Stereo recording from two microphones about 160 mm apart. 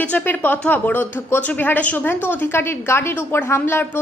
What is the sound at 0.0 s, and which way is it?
Speech, 10° left (ahead or behind).